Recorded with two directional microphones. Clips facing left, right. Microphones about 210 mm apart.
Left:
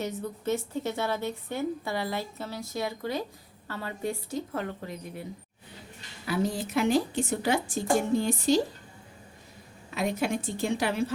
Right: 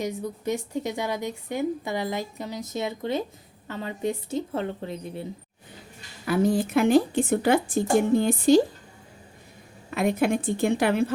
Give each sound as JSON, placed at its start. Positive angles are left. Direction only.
{"t": 0.0, "sound": "a woman's voice", "side_deg": -15}
{"t": 6.2, "sound": "a woman's voice", "side_deg": -50}
{"t": 9.9, "sound": "a woman's voice", "side_deg": -55}